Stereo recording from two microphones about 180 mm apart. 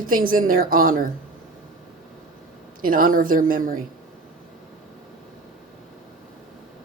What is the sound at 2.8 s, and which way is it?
A woman's voice, 50° right (ahead or behind).